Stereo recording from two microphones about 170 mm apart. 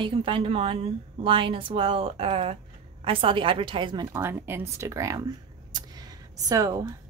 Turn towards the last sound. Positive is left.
turn(degrees=-20)  # may be behind; listen again after turning